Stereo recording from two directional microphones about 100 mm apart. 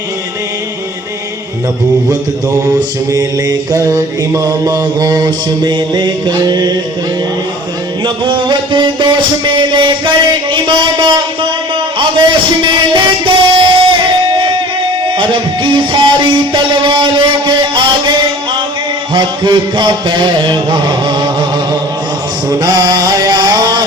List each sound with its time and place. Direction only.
2.6 s mantra: 35° right (ahead or behind)
8.0 s music: 50° right (ahead or behind)
10.5 s a man's voice: 55° right (ahead or behind)
12.6 s music: 50° right (ahead or behind)
15.2 s music: 50° right (ahead or behind)
19.1 s music: 45° right (ahead or behind)
22.4 s mantra: 40° right (ahead or behind)